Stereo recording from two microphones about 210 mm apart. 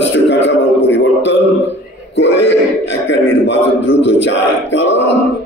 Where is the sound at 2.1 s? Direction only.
60° left (ahead or behind).